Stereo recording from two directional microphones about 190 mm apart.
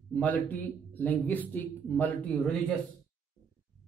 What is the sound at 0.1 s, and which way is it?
A man's voice, 10° left (ahead or behind).